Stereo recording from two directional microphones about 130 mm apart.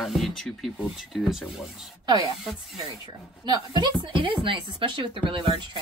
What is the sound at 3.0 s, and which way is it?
A woman's voice, 35° right (ahead or behind).